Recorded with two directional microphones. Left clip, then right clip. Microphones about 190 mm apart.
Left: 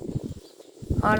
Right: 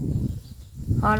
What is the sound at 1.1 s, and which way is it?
Speech, 10° left (ahead or behind).